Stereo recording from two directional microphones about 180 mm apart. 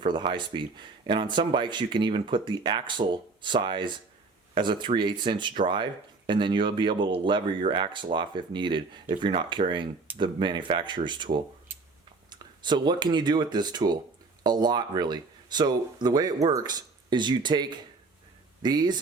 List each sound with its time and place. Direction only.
0.0 s speech: 25° right (ahead or behind)
12.3 s speech: 25° right (ahead or behind)